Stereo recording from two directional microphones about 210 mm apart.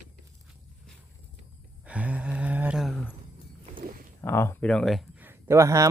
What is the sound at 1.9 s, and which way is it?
A man's voice, 5° right (ahead or behind).